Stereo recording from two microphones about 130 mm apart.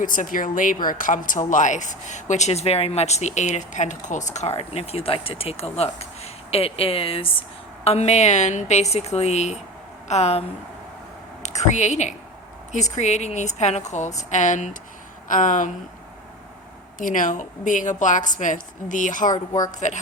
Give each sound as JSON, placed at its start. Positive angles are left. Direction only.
{"t": 0.0, "sound": "a woman's voice", "side_deg": 90}
{"t": 7.9, "sound": "speech", "side_deg": 55}
{"t": 11.4, "sound": "a woman's voice", "side_deg": 60}
{"t": 15.3, "sound": "a woman's voice", "side_deg": 80}
{"t": 17.0, "sound": "a woman's voice", "side_deg": 90}
{"t": 19.8, "sound": "a woman's voice", "side_deg": 70}